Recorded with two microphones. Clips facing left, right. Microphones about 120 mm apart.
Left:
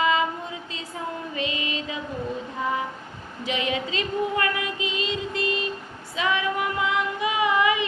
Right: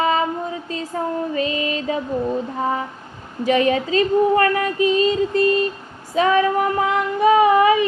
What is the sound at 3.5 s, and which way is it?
Female singing, 45° right (ahead or behind).